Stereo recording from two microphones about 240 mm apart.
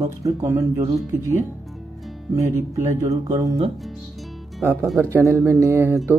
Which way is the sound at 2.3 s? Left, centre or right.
Centre.